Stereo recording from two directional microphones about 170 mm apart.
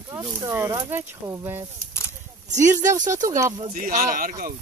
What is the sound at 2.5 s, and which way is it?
Speech, 45° right (ahead or behind).